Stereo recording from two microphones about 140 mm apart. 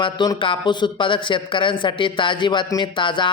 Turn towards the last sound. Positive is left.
turn(degrees=35)  # may be behind; listen again after turning